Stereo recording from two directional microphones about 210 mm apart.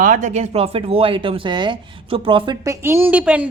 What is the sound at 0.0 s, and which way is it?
Speech, 40° right (ahead or behind).